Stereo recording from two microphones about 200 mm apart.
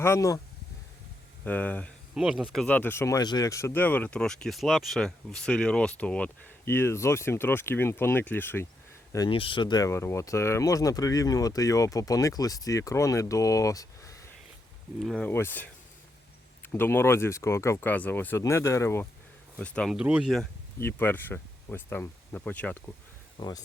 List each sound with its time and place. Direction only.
0.0 s speech: 15° left (ahead or behind)
1.5 s speech: 5° left (ahead or behind)
9.1 s speech: 25° left (ahead or behind)
14.9 s speech: centre (ahead or behind)
20.7 s speech: 10° left (ahead or behind)
23.4 s speech: 20° left (ahead or behind)